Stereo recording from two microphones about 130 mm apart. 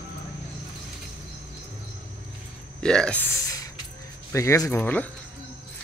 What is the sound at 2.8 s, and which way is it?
Speech, 5° left (ahead or behind).